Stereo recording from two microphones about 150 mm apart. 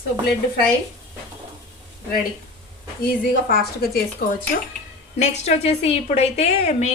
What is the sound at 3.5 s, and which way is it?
Speech, 90° left.